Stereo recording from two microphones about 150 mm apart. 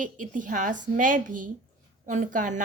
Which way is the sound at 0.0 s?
60° right (ahead or behind).